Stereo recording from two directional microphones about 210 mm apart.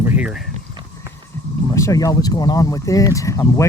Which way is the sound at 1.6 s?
15° left (ahead or behind).